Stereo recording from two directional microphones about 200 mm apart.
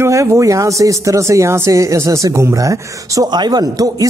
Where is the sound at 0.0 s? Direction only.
15° right (ahead or behind).